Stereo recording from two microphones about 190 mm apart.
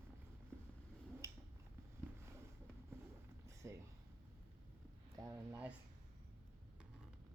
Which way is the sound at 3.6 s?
15° right (ahead or behind).